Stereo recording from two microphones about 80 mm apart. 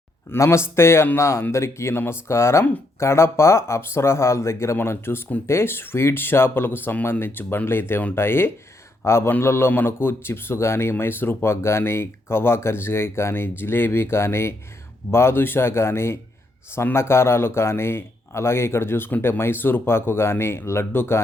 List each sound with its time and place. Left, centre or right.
0.3 s speech: left